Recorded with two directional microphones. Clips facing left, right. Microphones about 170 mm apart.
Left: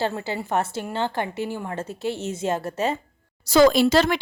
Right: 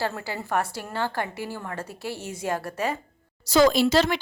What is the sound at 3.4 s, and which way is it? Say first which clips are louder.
Speech: left 3 dB; 55° left (ahead or behind).